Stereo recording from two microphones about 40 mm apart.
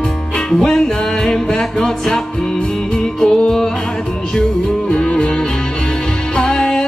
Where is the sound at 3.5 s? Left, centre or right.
Centre.